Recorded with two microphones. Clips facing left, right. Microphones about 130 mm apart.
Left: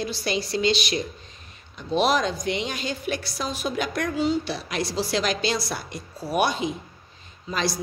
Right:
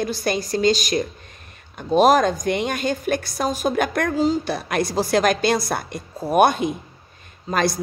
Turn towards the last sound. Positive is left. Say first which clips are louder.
# right 6 dB
turn(degrees=-50)  # may be behind; listen again after turning